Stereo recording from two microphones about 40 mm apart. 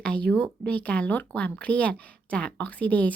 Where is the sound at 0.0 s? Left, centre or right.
Left.